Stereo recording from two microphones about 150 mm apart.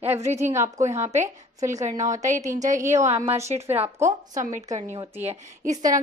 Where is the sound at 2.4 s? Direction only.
20° right (ahead or behind).